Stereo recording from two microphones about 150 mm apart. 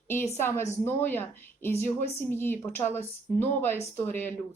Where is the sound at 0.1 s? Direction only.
15° left (ahead or behind).